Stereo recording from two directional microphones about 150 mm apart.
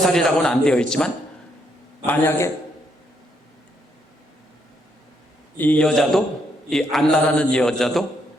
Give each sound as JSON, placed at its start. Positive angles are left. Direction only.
{"t": 0.1, "sound": "a man's voice", "side_deg": 5}
{"t": 2.0, "sound": "a man's voice", "side_deg": 15}
{"t": 5.5, "sound": "a man's voice", "side_deg": 10}